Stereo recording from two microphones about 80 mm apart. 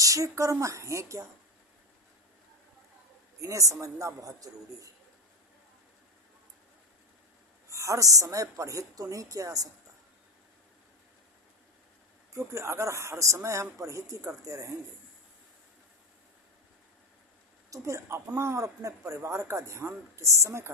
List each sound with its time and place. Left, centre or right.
0.0 s a woman's voice: right
3.4 s a woman's voice: right
7.7 s a woman's voice: right
12.3 s speech: right
17.7 s speech: right